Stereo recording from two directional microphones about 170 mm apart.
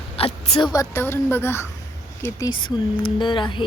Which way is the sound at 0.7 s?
15° left (ahead or behind).